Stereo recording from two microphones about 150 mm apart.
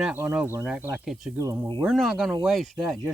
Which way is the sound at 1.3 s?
20° right (ahead or behind).